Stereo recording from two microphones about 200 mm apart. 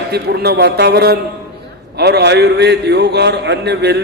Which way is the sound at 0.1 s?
55° right (ahead or behind).